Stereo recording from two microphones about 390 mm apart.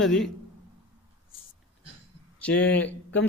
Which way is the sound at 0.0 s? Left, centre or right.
Centre.